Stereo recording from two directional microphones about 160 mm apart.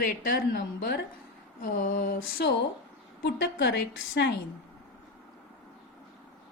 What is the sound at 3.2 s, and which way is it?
A woman's voice, 90° left.